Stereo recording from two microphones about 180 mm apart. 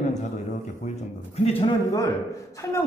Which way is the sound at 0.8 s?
35° left (ahead or behind).